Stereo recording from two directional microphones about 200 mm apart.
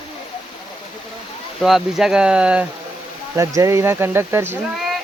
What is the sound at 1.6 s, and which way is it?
Speech, centre (ahead or behind).